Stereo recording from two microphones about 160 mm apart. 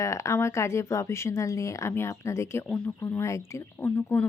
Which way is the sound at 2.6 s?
5° left (ahead or behind).